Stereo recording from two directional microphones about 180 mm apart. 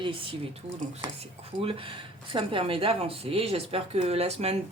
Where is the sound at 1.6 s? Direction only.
30° right (ahead or behind).